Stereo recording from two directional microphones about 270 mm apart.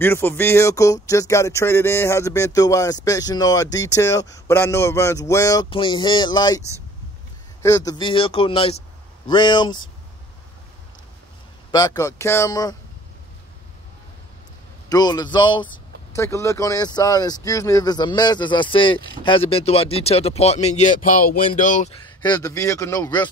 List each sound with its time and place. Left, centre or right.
0.0 s speech: centre
7.6 s speech: centre
11.7 s speech: centre
14.9 s speech: centre